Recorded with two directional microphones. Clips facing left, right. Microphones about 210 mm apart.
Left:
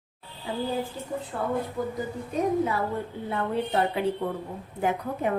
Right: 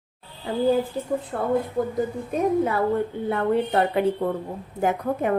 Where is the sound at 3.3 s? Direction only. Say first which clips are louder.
Right 5 dB; 55° right (ahead or behind).